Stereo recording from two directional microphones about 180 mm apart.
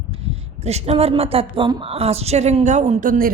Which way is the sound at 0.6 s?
35° right (ahead or behind).